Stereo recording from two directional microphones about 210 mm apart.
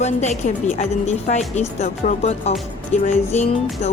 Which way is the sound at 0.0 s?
35° left (ahead or behind).